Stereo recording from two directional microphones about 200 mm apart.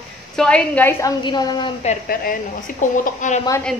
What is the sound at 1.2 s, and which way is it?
Speech, 20° left (ahead or behind).